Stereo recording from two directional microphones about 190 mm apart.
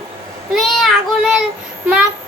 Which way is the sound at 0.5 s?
Centre (ahead or behind).